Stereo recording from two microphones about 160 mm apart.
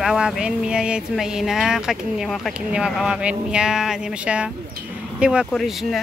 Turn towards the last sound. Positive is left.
turn(degrees=0)  # may be behind; listen again after turning